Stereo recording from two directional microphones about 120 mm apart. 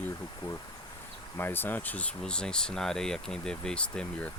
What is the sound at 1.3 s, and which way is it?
Speech, 15° left (ahead or behind).